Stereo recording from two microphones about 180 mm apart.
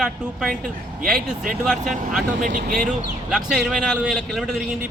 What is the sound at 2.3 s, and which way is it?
Speech, 45° right (ahead or behind).